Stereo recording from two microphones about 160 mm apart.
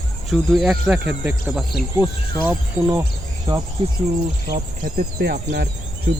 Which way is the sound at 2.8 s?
25° right (ahead or behind).